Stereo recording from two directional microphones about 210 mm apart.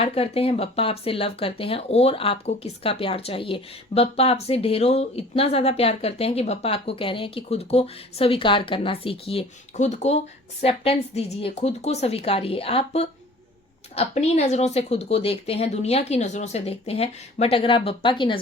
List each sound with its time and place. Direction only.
0.0 s speech: 30° left (ahead or behind)